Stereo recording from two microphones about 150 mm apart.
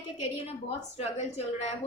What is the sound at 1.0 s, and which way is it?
Speech, 45° left (ahead or behind).